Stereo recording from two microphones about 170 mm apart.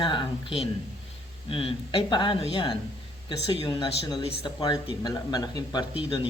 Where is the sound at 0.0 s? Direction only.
30° left (ahead or behind).